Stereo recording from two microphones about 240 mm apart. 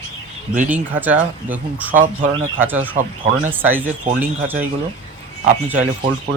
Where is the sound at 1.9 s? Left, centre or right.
Right.